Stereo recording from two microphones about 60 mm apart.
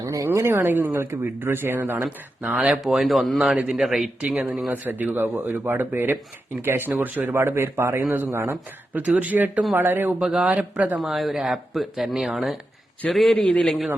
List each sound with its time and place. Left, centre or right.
0.0 s a sound: right
0.3 s speech: right
2.0 s speech: centre
2.8 s speech: centre
4.2 s speech: right
7.3 s speech: right
8.0 s speech: right
10.2 s speech: centre
10.5 s speech: right
11.0 s speech: centre
13.3 s a man's voice: centre
13.7 s speech: centre